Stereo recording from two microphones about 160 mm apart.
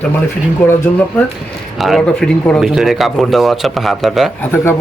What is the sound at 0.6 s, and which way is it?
Speech, 10° left (ahead or behind).